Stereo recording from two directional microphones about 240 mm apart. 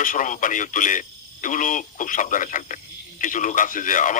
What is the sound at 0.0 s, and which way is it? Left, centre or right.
Speech, left.